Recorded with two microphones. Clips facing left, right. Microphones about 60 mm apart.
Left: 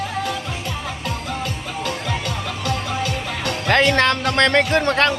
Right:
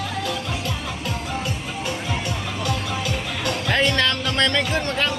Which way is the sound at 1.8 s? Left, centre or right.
Left.